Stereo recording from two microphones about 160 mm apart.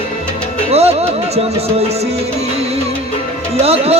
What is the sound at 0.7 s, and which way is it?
Music, 40° right (ahead or behind).